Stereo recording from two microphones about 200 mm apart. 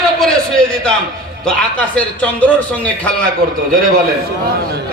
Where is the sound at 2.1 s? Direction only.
5° left (ahead or behind).